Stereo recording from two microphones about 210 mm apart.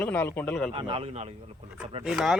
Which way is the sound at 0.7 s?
25° right (ahead or behind).